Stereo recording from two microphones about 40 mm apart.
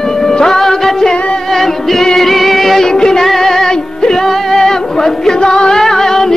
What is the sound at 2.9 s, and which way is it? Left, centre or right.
Music, centre.